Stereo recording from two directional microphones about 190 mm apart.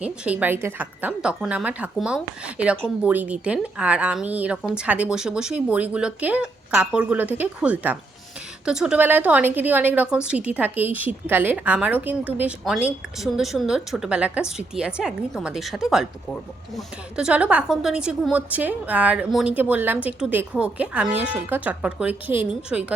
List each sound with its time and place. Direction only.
0.0 s a woman's voice: 5° right (ahead or behind)